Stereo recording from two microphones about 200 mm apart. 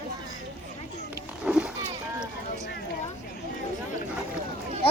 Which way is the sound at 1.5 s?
5° right (ahead or behind).